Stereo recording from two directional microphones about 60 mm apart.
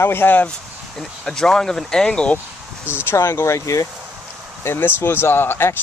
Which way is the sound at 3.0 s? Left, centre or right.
Left.